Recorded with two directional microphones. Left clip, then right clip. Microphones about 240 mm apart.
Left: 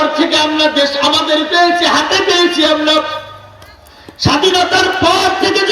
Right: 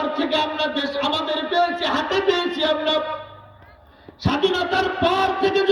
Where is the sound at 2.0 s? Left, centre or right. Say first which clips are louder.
Left 9 dB; right.